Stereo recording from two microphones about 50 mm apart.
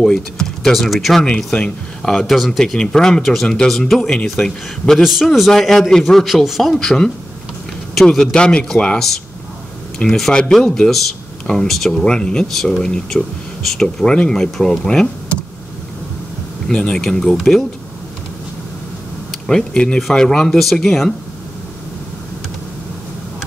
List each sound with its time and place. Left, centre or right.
0.0 s speech: centre
0.7 s speech: centre
1.5 s speech: centre
2.6 s speech: centre
5.0 s speech: centre
6.2 s speech: centre
6.7 s speech: centre
12.0 s speech: centre
16.8 s speech: centre
19.4 s speech: centre
20.0 s speech: centre